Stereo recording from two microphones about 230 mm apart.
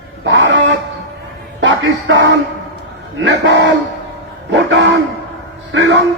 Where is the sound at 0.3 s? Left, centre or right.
Right.